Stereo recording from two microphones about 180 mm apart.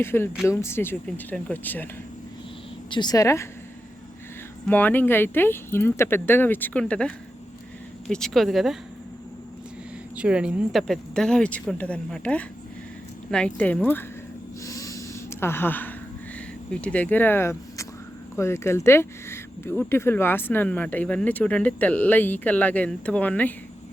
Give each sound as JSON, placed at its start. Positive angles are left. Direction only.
{"t": 0.0, "sound": "speech", "side_deg": 10}
{"t": 2.9, "sound": "speech", "side_deg": 25}
{"t": 4.7, "sound": "speech", "side_deg": 10}
{"t": 10.2, "sound": "speech", "side_deg": -5}
{"t": 14.6, "sound": "snort", "side_deg": 15}
{"t": 16.8, "sound": "speech", "side_deg": 5}